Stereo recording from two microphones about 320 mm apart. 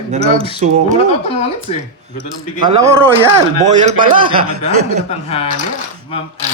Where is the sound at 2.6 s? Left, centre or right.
Centre.